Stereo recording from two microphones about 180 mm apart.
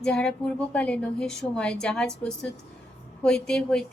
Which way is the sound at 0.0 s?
5° left (ahead or behind).